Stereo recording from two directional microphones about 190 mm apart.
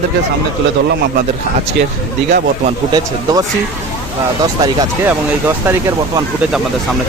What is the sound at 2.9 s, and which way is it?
Speech, 20° right (ahead or behind).